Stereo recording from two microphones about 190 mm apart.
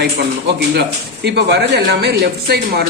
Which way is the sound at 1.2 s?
60° right (ahead or behind).